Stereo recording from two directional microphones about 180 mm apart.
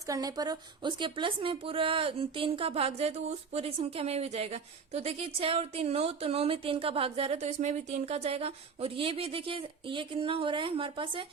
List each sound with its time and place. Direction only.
0.1 s a woman's voice: 20° right (ahead or behind)